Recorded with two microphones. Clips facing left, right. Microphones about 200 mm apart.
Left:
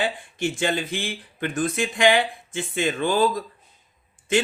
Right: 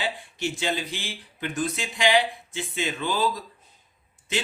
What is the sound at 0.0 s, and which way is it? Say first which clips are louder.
Speech: left 4 dB; 50° left (ahead or behind).